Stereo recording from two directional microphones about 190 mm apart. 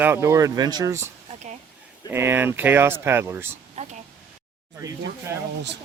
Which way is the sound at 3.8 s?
35° right (ahead or behind).